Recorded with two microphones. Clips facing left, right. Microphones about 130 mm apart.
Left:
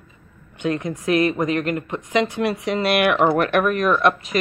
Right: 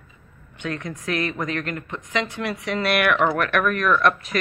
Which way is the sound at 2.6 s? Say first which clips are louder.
Left 1 dB; 25° left (ahead or behind).